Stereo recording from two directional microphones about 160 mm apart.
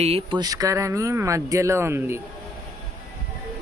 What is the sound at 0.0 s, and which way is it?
Speech, 35° right (ahead or behind).